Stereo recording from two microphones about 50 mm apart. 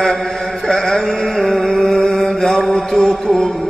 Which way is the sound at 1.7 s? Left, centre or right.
Centre.